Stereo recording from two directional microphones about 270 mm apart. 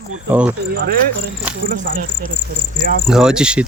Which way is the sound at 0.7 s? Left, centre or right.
Right.